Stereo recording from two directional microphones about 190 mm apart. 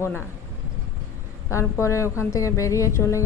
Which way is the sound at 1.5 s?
15° left (ahead or behind).